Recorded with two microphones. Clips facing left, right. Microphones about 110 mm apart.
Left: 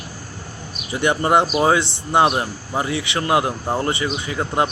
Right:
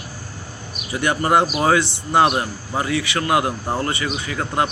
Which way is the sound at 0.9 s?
25° left (ahead or behind).